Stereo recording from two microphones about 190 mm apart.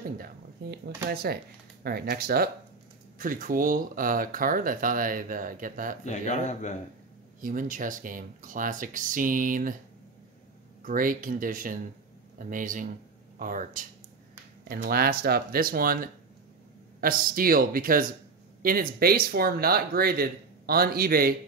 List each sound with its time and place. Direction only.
0.2 s a sound: 55° right (ahead or behind)
1.1 s speech: 55° right (ahead or behind)
6.0 s speech: 40° left (ahead or behind)
7.4 s speech: 45° right (ahead or behind)
10.8 s speech: 45° right (ahead or behind)